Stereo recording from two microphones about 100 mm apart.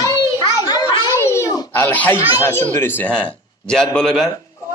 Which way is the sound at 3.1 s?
5° left (ahead or behind).